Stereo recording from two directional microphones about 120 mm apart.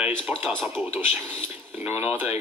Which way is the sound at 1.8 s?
15° right (ahead or behind).